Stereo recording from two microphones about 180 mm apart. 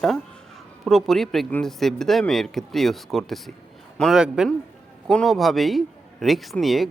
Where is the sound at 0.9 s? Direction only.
Centre (ahead or behind).